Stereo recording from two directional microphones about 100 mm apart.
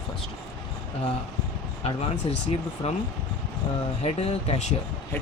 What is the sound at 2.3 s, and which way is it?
Speech, 75° left (ahead or behind).